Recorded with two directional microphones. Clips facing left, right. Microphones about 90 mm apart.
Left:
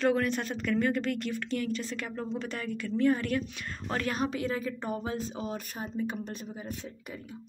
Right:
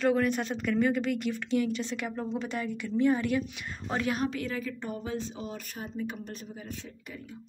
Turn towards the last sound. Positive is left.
turn(degrees=25)  # may be behind; listen again after turning